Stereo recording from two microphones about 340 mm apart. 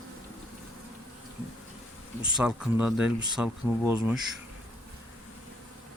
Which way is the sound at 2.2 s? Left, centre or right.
Centre.